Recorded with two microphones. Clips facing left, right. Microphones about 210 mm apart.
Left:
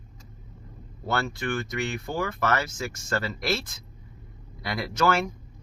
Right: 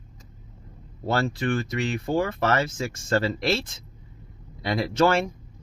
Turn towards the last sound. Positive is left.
turn(degrees=-30)  # may be behind; listen again after turning